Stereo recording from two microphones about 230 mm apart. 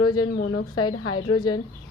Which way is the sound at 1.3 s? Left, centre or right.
Centre.